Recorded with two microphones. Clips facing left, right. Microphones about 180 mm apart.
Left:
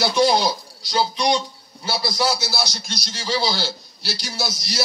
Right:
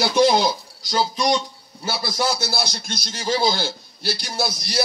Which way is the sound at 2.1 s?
50° right (ahead or behind).